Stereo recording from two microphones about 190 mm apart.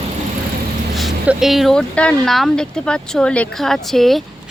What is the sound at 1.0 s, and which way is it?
Speech, 5° right (ahead or behind).